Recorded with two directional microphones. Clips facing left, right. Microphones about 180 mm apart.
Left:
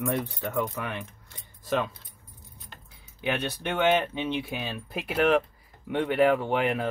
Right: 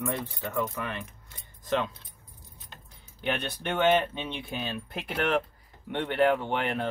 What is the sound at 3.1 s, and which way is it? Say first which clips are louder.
Speech: left 2 dB; 5° left (ahead or behind).